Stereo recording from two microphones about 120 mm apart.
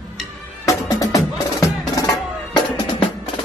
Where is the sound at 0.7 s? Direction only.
30° left (ahead or behind).